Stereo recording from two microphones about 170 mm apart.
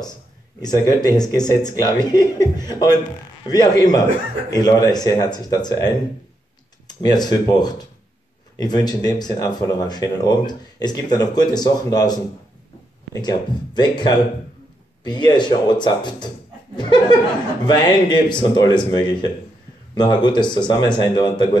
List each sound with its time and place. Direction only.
0.6 s speech: 20° left (ahead or behind)
7.0 s speech: 25° left (ahead or behind)
17.6 s speech: 25° left (ahead or behind)